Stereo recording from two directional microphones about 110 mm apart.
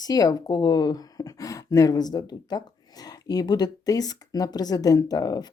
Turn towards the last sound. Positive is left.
turn(degrees=35)  # may be behind; listen again after turning